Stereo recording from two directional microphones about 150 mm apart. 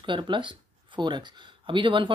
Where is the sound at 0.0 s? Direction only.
35° right (ahead or behind).